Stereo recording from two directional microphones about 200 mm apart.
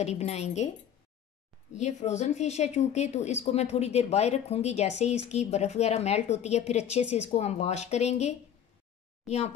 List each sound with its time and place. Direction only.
0.0 s speech: 35° left (ahead or behind)
1.7 s speech: 35° left (ahead or behind)